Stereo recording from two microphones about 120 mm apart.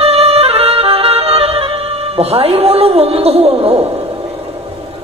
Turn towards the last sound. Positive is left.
turn(degrees=-55)  # may be behind; listen again after turning